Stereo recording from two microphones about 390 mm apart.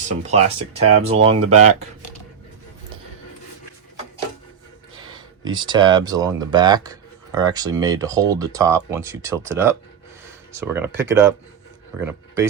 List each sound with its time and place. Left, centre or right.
0.3 s speech: centre
5.5 s speech: centre